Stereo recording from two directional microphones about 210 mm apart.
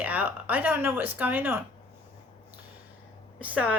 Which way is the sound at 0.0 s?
5° right (ahead or behind).